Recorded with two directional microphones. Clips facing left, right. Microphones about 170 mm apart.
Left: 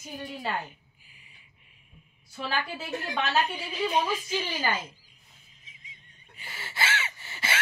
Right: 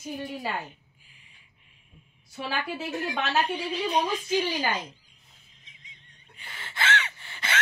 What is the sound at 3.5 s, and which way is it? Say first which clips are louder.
Speech: right 1 dB; 5° left (ahead or behind).